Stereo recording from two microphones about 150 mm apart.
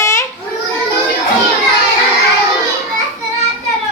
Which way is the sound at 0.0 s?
20° left (ahead or behind).